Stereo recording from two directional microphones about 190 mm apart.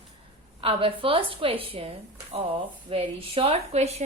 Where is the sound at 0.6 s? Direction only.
30° right (ahead or behind).